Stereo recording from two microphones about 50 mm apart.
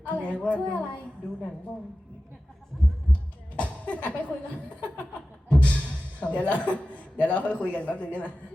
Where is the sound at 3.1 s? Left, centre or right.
Left.